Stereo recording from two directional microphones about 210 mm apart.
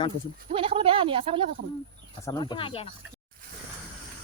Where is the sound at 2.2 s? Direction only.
20° left (ahead or behind).